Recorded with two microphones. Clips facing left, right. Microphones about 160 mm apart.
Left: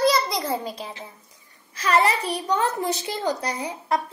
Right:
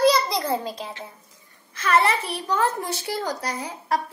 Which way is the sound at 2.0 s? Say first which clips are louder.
Left 1 dB; 15° left (ahead or behind).